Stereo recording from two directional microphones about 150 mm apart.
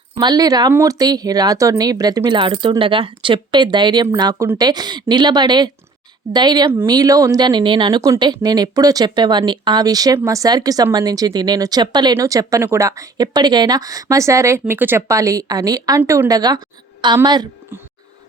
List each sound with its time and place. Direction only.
0.2 s speech: 25° right (ahead or behind)